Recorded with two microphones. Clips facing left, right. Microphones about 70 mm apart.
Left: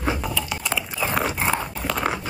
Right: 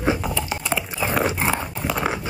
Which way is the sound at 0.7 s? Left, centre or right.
Centre.